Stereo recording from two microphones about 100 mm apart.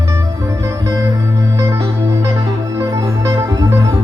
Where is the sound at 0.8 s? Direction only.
35° right (ahead or behind).